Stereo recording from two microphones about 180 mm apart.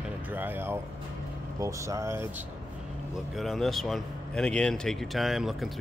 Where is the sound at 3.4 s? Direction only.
Centre (ahead or behind).